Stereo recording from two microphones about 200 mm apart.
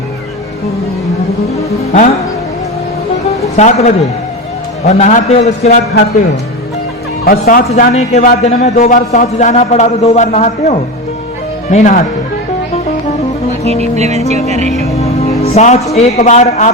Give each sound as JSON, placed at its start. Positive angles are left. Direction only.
{"t": 3.6, "sound": "a man's voice", "side_deg": 35}
{"t": 7.3, "sound": "a man's voice", "side_deg": 45}
{"t": 7.7, "sound": "a man's voice", "side_deg": 35}
{"t": 13.7, "sound": "music", "side_deg": -35}
{"t": 14.9, "sound": "music", "side_deg": 30}
{"t": 15.4, "sound": "a man's voice", "side_deg": 30}